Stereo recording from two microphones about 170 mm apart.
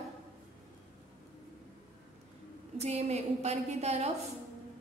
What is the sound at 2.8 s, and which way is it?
A woman's voice, 40° right (ahead or behind).